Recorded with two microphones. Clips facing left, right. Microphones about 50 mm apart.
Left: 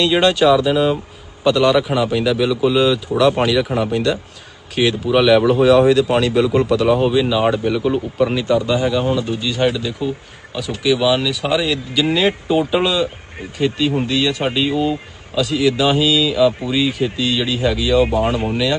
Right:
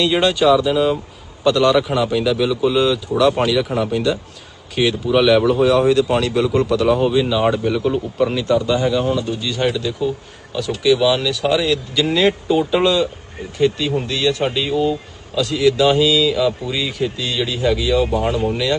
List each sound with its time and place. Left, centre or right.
0.0 s a man's voice: centre
9.0 s speech: left
9.4 s a man's voice: centre
18.1 s speech: centre
18.5 s a man's voice: centre